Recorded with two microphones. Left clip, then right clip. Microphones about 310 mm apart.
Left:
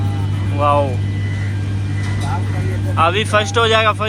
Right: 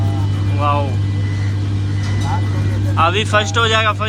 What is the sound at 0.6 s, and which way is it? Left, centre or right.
Speech, centre.